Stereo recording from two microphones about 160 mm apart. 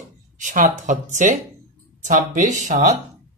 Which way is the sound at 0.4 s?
50° right (ahead or behind).